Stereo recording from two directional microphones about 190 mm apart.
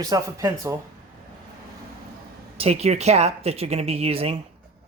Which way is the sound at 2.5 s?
35° right (ahead or behind).